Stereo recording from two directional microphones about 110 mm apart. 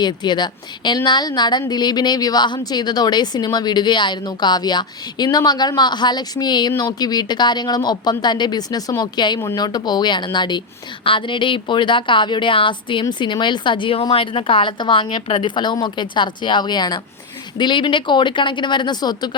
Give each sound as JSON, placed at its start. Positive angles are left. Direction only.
{"t": 0.0, "sound": "a woman's voice", "side_deg": 40}